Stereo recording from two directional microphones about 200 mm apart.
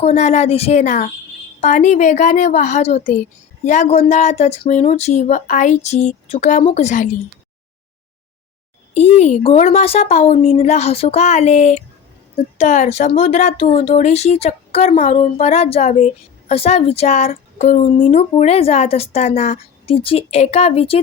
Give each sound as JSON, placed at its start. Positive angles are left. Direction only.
{"t": 0.0, "sound": "a woman's voice", "side_deg": 35}
{"t": 9.0, "sound": "a woman's voice", "side_deg": 35}